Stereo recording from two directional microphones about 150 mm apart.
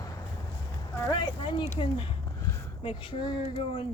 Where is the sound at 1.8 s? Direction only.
35° left (ahead or behind).